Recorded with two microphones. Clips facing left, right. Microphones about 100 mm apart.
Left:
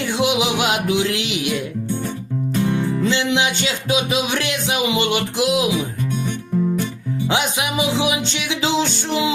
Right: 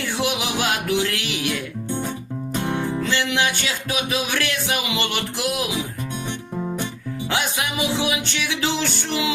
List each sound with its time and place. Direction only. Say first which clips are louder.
0.2 s music: left 5 dB; 20° left (ahead or behind)
2.6 s music: left 4 dB; 20° right (ahead or behind)
3.0 s speech: left 3 dB; 20° left (ahead or behind)
7.3 s speech: left 3 dB; 15° left (ahead or behind)